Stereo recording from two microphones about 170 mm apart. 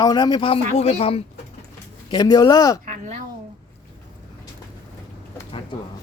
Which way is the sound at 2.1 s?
20° left (ahead or behind).